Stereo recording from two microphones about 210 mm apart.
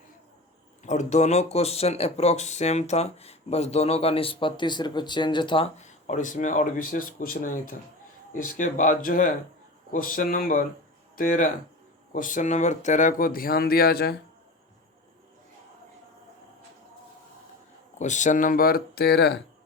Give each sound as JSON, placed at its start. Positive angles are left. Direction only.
{"t": 0.9, "sound": "speech", "side_deg": 35}
{"t": 17.9, "sound": "speech", "side_deg": 35}